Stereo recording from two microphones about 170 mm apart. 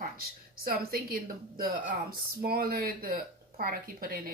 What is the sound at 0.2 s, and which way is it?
Speech, 60° right (ahead or behind).